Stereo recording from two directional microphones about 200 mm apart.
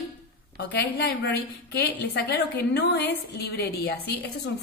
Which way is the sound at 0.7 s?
55° left (ahead or behind).